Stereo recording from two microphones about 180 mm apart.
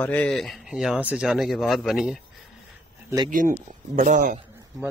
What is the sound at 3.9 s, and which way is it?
Speech, 45° right (ahead or behind).